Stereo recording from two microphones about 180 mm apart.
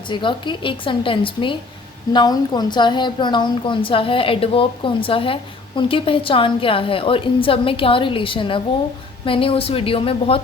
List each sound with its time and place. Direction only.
0.1 s a woman's voice: 25° left (ahead or behind)